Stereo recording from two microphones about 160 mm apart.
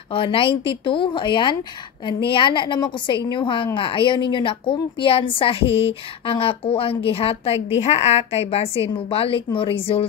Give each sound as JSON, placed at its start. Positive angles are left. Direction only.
{"t": 0.1, "sound": "a woman's voice", "side_deg": 35}